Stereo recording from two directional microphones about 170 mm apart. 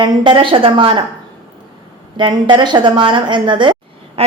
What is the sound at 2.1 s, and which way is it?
A woman's voice, 25° right (ahead or behind).